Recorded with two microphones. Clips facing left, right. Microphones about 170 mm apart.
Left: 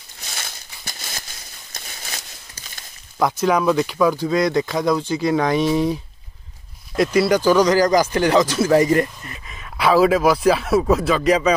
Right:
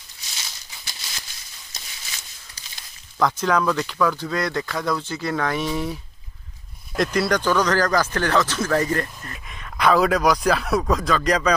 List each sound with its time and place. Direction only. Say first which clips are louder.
0.2 s a sound: left 6 dB; 55° left (ahead or behind)
3.2 s speech: left 2 dB; 10° left (ahead or behind)
7.0 s speech: left 5 dB; 5° left (ahead or behind)